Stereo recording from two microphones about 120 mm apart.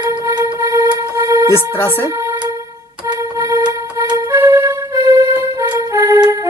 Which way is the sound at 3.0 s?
25° right (ahead or behind).